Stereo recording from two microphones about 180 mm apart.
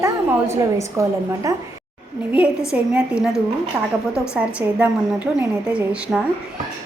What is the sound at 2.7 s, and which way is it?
A woman's voice, 5° right (ahead or behind).